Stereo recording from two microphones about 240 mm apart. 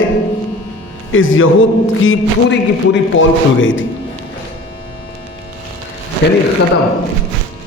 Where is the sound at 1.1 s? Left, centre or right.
Left.